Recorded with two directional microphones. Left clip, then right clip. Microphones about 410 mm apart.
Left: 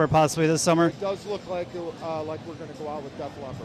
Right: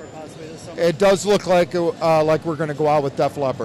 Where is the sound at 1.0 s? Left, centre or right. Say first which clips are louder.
Right 14 dB; right.